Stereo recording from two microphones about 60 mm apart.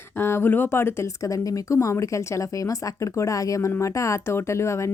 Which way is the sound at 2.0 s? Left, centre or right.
Left.